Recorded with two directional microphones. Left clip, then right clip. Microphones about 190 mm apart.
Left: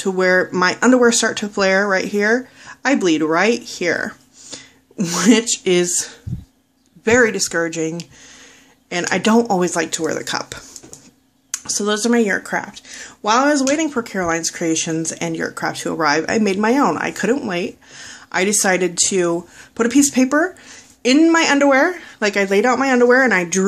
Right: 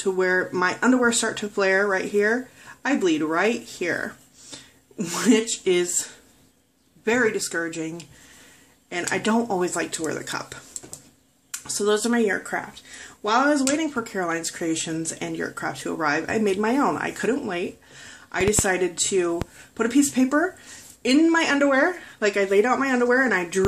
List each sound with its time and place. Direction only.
0.0 s speech: 40° left (ahead or behind)